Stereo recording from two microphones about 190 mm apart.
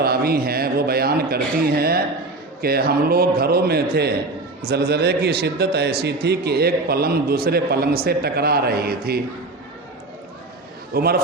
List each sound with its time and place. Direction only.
0.0 s a man's voice: 55° right (ahead or behind)
10.9 s a man's voice: 55° right (ahead or behind)